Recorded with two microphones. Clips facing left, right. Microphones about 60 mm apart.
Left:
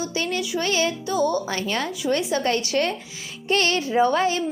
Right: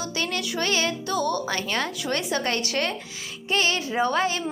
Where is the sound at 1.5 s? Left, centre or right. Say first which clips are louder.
Left 1 dB; right.